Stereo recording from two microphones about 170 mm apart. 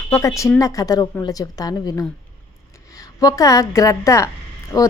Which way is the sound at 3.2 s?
20° left (ahead or behind).